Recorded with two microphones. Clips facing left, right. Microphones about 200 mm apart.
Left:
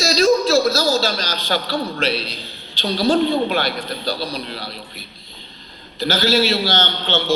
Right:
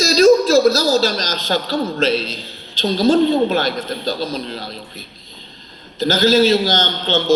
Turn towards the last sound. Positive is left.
turn(degrees=-40)  # may be behind; listen again after turning